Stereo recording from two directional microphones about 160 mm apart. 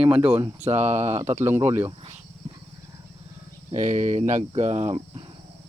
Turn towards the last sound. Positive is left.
turn(degrees=-40)  # may be behind; listen again after turning